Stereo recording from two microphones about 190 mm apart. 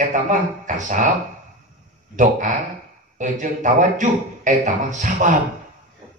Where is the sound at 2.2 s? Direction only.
40° right (ahead or behind).